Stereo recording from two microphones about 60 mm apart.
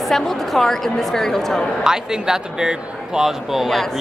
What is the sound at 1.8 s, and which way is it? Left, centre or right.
A man's voice, centre.